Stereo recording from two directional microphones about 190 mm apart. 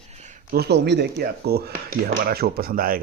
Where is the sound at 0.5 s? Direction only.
60° right (ahead or behind).